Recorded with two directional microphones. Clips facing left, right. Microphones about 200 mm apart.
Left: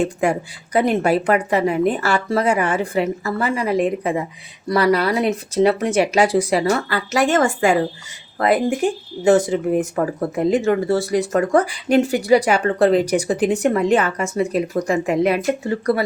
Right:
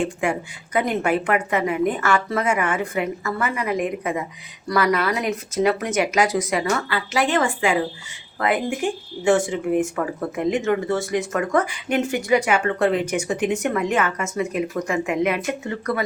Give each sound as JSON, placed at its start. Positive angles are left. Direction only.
{"t": 0.0, "sound": "speech", "side_deg": 40}